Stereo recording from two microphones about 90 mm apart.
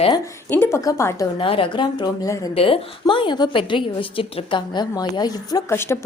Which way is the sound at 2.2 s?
40° left (ahead or behind).